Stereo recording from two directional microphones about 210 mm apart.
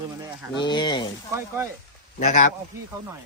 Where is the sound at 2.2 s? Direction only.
35° left (ahead or behind).